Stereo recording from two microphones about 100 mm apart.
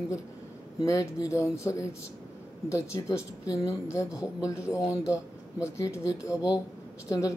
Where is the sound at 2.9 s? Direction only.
30° left (ahead or behind).